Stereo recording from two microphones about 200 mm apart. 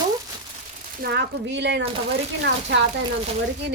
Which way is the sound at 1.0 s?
55° right (ahead or behind).